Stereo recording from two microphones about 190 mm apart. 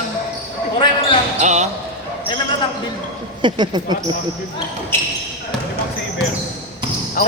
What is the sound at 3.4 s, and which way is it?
Speech, 25° right (ahead or behind).